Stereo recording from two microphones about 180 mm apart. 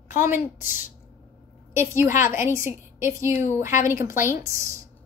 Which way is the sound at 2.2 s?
15° right (ahead or behind).